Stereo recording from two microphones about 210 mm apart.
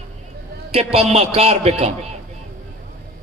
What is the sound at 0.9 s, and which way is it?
A man's voice, 30° right (ahead or behind).